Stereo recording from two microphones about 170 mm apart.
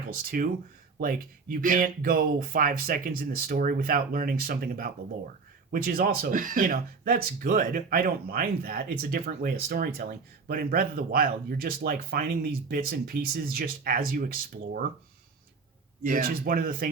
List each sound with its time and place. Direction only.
0.3 s speech: 60° right (ahead or behind)
16.0 s speech: 55° right (ahead or behind)